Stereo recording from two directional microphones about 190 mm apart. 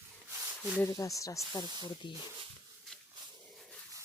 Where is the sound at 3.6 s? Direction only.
5° left (ahead or behind).